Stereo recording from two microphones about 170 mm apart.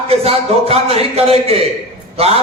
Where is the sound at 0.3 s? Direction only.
35° right (ahead or behind).